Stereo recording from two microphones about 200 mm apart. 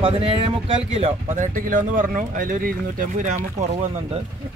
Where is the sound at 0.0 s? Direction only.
25° right (ahead or behind).